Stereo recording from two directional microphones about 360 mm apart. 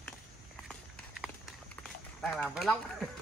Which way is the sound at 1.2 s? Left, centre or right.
Centre.